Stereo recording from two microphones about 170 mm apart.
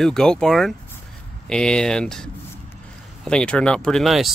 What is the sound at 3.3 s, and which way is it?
Speech, 5° left (ahead or behind).